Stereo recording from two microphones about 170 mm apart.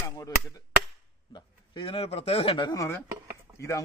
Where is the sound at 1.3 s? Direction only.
30° left (ahead or behind).